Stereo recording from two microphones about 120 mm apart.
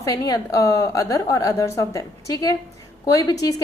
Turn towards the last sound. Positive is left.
turn(degrees=30)  # may be behind; listen again after turning